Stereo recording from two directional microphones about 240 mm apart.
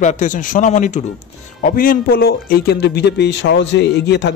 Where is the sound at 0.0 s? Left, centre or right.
Left.